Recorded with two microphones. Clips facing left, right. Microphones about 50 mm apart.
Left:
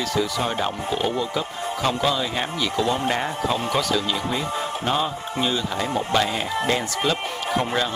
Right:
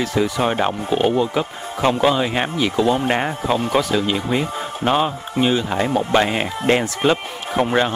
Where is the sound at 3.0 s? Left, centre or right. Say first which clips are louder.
Right 3 dB; right.